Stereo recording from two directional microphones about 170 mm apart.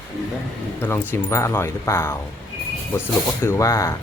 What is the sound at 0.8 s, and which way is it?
Speech, 15° left (ahead or behind).